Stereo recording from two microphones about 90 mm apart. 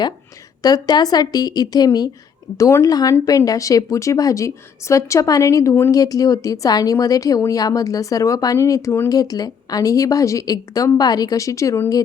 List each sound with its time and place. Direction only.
0.6 s a woman's voice: 50° left (ahead or behind)
2.6 s speech: 35° left (ahead or behind)
5.9 s speech: 40° left (ahead or behind)
9.0 s speech: 45° left (ahead or behind)